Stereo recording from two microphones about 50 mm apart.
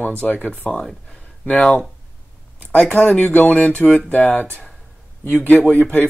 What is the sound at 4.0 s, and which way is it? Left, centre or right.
Speech, left.